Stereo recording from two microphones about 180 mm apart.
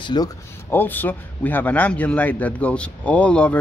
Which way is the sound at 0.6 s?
10° left (ahead or behind).